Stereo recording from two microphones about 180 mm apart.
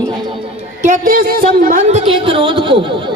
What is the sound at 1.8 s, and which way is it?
A woman's voice, 35° right (ahead or behind).